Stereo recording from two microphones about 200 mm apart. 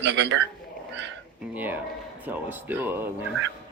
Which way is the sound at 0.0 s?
65° right (ahead or behind).